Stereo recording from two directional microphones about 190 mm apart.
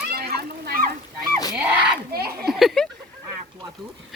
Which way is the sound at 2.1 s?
55° right (ahead or behind).